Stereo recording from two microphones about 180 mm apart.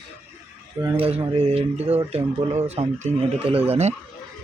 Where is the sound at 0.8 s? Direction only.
20° right (ahead or behind).